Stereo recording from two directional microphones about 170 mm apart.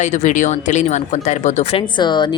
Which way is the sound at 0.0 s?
45° left (ahead or behind).